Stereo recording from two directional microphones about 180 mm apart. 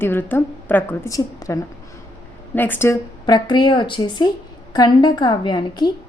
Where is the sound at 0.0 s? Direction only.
10° left (ahead or behind).